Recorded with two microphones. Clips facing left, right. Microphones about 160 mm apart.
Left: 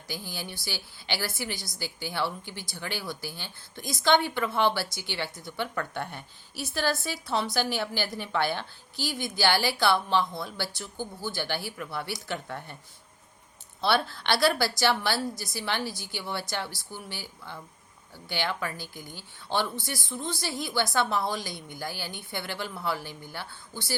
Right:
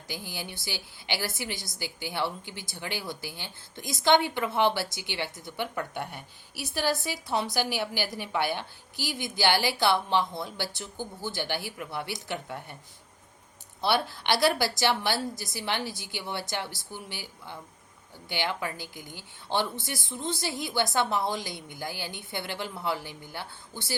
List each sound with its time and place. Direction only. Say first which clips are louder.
0.1 s a woman's voice: left 1 dB; 15° right (ahead or behind)
13.8 s a woman's voice: even; 15° right (ahead or behind)